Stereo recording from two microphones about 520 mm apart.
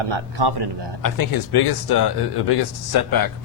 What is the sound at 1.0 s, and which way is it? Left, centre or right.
Speech, left.